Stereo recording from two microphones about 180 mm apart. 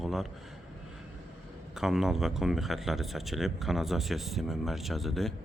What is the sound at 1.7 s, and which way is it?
Speech, centre (ahead or behind).